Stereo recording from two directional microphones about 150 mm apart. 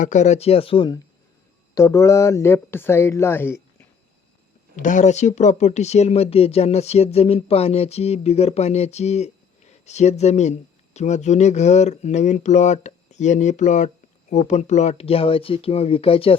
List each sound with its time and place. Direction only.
0.0 s speech: 50° left (ahead or behind); by 0.9 s 35° left (ahead or behind)
1.7 s speech: 20° left (ahead or behind)
4.8 s speech: 55° left (ahead or behind); by 16.4 s 40° left (ahead or behind)